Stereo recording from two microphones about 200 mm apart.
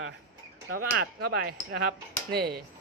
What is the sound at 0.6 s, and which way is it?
Speech, 90° right.